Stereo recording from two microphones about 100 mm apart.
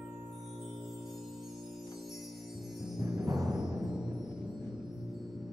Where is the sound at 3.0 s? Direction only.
25° right (ahead or behind).